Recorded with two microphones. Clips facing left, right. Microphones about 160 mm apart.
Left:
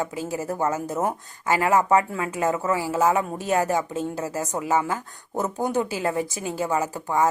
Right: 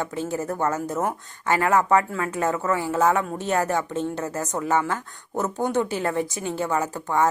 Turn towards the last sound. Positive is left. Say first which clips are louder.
# even
turn(degrees=15)  # may be behind; listen again after turning